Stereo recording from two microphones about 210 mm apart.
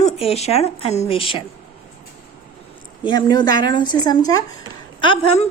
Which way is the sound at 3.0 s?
20° left (ahead or behind).